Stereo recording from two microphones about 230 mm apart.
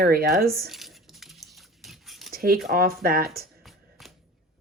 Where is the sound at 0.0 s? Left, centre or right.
Right.